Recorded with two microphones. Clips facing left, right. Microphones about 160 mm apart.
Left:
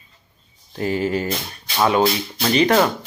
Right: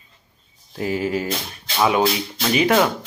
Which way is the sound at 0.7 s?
5° right (ahead or behind).